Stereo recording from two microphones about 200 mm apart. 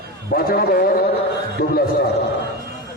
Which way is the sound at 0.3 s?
50° left (ahead or behind).